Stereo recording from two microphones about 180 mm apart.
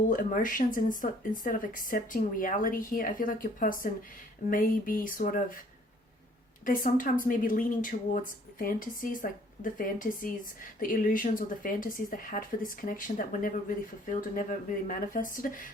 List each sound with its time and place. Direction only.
0.1 s a woman's voice: 50° left (ahead or behind)
6.7 s a woman's voice: 50° left (ahead or behind)